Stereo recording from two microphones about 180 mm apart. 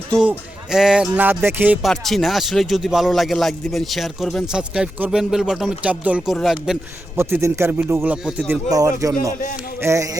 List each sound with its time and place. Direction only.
0.3 s a man's voice: 5° right (ahead or behind)
7.2 s speech: 15° right (ahead or behind)
8.7 s speech: 20° right (ahead or behind)